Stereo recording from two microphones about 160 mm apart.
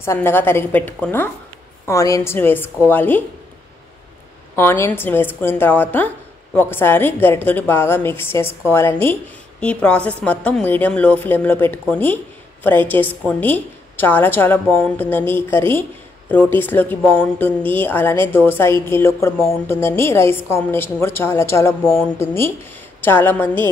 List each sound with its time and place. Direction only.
0.0 s a woman's voice: 15° left (ahead or behind)
4.6 s a woman's voice: 15° left (ahead or behind)